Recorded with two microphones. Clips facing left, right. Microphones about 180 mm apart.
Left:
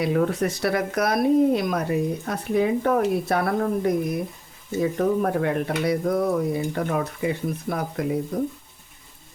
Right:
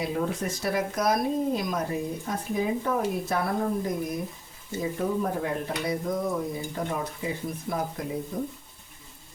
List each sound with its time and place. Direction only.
0.0 s speech: 70° left (ahead or behind)